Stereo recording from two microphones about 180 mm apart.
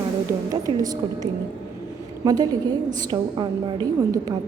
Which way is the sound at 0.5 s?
20° right (ahead or behind).